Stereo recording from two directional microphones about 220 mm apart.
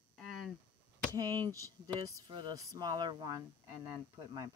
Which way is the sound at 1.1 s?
15° right (ahead or behind).